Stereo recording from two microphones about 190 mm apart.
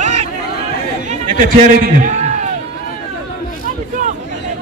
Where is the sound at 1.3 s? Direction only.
45° right (ahead or behind).